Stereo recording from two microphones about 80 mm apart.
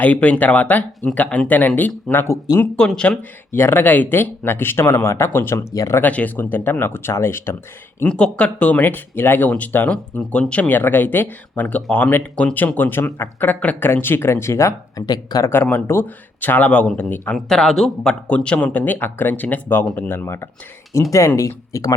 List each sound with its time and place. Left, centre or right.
0.0 s speech: centre
2.7 s speech: centre
3.5 s speech: left
5.7 s speech: left
6.0 s speech: centre
8.0 s speech: centre; by 14.7 s left
14.9 s speech: left
15.6 s speech: left
17.3 s speech: centre
18.3 s speech: centre; by 21.9 s left